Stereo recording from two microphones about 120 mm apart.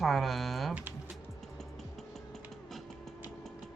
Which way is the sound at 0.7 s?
15° right (ahead or behind).